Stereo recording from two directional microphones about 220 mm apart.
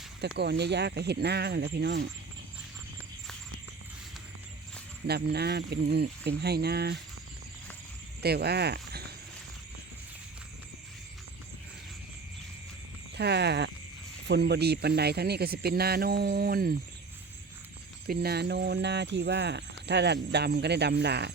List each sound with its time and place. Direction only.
0.3 s speech: 50° right (ahead or behind)
5.0 s speech: 45° right (ahead or behind)
8.2 s speech: 45° right (ahead or behind)
13.1 s speech: 50° right (ahead or behind)
18.0 s speech: 45° right (ahead or behind)